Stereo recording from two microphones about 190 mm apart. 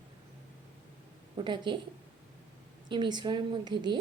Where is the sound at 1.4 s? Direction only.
25° right (ahead or behind).